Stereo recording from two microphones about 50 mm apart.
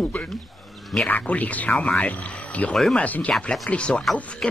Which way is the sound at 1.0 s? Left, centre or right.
Left.